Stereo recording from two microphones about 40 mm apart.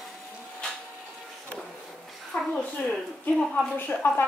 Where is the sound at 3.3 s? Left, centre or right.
Centre.